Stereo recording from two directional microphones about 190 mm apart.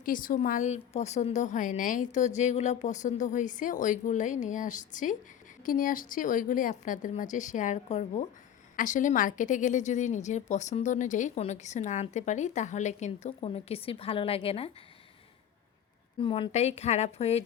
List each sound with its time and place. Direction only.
0.0 s a woman's voice: 45° left (ahead or behind); by 14.7 s 30° left (ahead or behind)
16.2 s a woman's voice: 30° left (ahead or behind)